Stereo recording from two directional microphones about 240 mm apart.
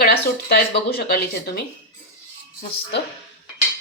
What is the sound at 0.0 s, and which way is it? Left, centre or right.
Speech, left.